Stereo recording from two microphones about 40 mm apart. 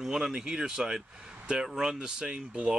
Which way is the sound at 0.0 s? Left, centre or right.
Centre.